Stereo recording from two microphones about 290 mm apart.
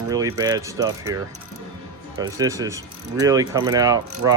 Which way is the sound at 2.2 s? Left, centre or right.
Centre.